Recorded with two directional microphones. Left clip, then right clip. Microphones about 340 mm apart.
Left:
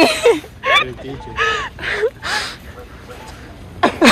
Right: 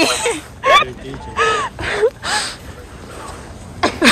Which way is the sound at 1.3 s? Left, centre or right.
Centre.